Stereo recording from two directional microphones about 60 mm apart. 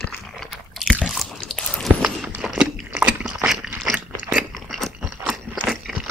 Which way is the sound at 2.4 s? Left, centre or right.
Centre.